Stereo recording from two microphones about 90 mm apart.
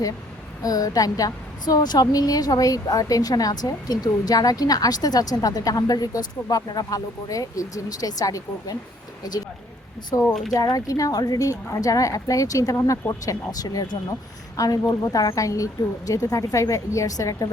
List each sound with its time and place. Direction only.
0.6 s a woman's voice: 45° left (ahead or behind)
10.2 s speech: 5° left (ahead or behind)
10.5 s a woman's voice: 45° left (ahead or behind)